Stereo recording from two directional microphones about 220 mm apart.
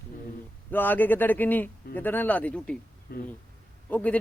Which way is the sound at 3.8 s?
5° left (ahead or behind).